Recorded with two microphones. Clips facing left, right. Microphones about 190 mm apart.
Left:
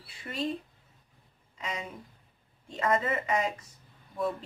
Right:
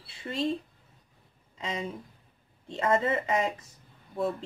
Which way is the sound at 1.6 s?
25° right (ahead or behind).